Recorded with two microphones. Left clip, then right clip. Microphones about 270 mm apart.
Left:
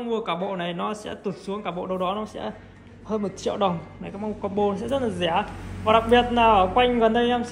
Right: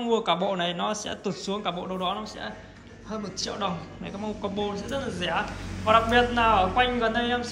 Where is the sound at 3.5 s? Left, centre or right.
Centre.